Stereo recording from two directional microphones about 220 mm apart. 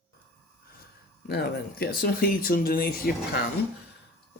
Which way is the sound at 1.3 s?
45° left (ahead or behind).